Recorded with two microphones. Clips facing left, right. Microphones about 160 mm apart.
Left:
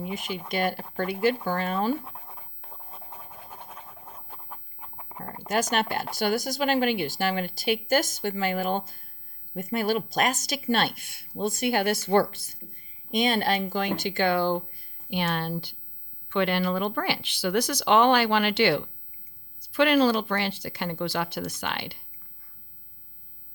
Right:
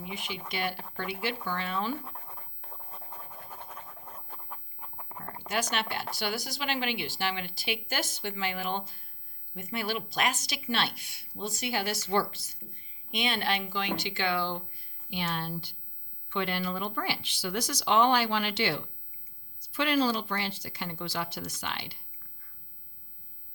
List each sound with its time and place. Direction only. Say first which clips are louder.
0.0 s a woman's voice: left 6 dB; 45° left (ahead or behind)
2.0 s writing: left 2 dB; 5° left (ahead or behind)
5.5 s a woman's voice: left 6 dB; 45° left (ahead or behind); by 21.9 s 65° left (ahead or behind)